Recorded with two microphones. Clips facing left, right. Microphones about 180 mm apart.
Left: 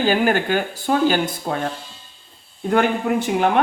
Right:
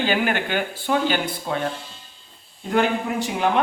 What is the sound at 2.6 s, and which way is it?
Speech, 50° left (ahead or behind).